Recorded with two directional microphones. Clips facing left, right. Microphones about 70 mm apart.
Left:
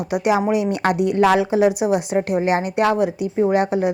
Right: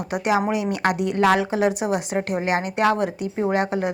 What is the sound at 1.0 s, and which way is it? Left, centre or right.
Speech, left.